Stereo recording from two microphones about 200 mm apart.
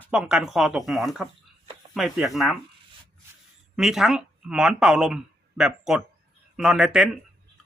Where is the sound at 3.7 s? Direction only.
Centre (ahead or behind).